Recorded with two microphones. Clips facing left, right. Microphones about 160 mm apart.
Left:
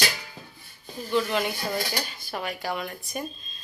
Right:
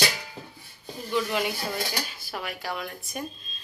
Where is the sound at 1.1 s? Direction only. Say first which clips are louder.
Left 2 dB; 10° right (ahead or behind).